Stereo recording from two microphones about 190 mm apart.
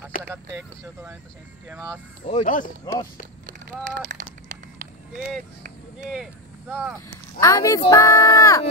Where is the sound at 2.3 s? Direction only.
40° left (ahead or behind).